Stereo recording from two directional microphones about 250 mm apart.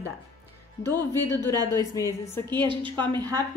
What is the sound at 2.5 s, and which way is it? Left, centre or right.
Speech, centre.